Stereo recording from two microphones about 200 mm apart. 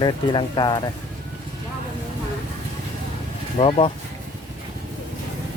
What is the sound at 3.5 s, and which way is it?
Speech, 30° left (ahead or behind).